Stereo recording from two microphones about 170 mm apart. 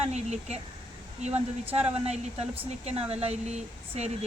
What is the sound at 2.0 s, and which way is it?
Speech, 35° right (ahead or behind).